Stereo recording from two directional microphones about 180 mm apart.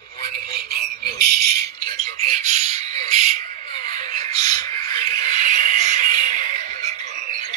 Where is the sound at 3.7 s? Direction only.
25° left (ahead or behind).